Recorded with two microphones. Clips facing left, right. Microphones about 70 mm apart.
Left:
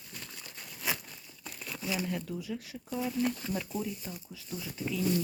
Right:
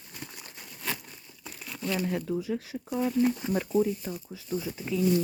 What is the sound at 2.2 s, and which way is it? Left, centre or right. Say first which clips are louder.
Speech: right 7 dB; right.